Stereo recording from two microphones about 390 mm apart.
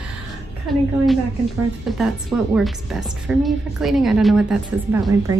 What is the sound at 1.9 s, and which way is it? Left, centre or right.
A woman's voice, centre.